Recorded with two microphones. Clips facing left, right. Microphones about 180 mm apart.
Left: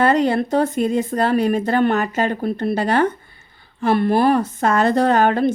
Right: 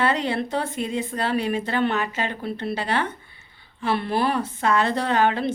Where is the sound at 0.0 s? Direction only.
45° left (ahead or behind).